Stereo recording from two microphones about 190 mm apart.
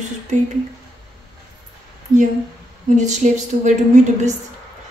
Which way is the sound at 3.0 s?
40° right (ahead or behind).